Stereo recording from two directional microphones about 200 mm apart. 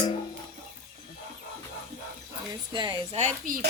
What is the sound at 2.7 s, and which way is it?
Speech, 20° right (ahead or behind).